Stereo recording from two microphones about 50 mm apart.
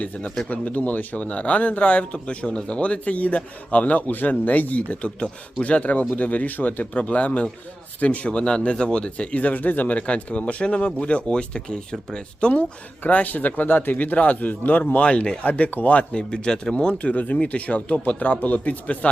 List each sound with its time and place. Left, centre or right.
0.0 s speech: left
12.5 s speech: left
14.9 s speech: left
16.9 s speech: left